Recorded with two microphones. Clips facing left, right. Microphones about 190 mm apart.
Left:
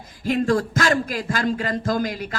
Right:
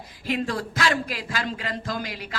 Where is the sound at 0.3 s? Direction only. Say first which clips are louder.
Left 7 dB; 45° left (ahead or behind).